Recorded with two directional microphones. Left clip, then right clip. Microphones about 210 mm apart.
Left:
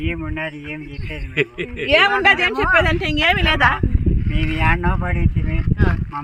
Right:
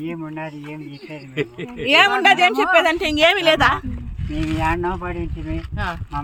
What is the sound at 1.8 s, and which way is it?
Speech, 55° right (ahead or behind).